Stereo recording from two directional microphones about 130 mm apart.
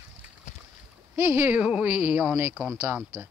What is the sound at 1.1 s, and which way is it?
A woman's voice, 15° right (ahead or behind).